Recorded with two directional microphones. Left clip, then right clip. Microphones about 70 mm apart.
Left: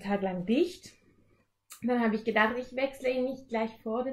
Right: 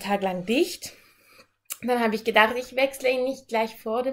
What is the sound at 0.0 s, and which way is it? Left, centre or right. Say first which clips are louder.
A woman's voice: right 6 dB; right.